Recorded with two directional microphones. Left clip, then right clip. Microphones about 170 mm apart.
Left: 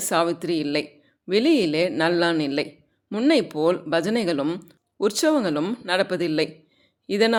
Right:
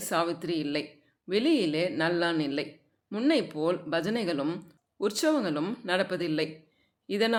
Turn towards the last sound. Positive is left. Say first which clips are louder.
# left 7 dB
turn(degrees=30)  # may be behind; listen again after turning